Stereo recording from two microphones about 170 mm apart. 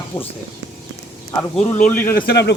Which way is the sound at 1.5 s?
5° left (ahead or behind).